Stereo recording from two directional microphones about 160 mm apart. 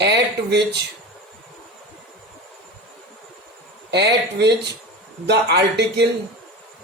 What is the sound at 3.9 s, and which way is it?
Speech, 90° right.